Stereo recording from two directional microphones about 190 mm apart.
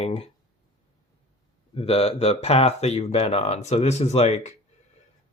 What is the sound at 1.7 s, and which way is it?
Speech, 30° left (ahead or behind).